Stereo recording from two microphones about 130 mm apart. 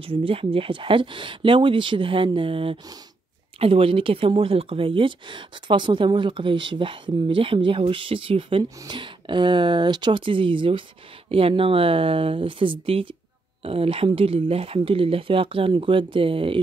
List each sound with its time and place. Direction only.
0.0 s speech: 45° right (ahead or behind)